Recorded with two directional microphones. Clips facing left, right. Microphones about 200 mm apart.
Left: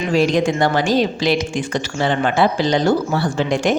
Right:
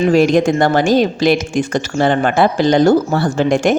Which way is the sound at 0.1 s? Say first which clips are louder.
Right 1 dB; 50° right (ahead or behind).